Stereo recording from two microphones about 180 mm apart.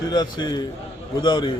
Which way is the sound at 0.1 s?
25° left (ahead or behind).